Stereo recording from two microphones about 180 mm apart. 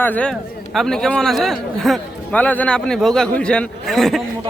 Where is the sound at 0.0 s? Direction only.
5° left (ahead or behind).